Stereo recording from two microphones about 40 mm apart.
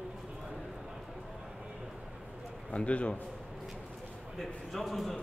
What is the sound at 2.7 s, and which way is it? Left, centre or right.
Speech, left.